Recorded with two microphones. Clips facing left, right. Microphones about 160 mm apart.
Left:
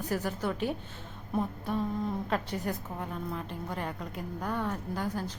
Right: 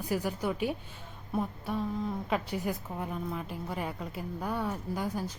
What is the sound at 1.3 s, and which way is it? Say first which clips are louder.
A woman's voice: left 1 dB; centre (ahead or behind).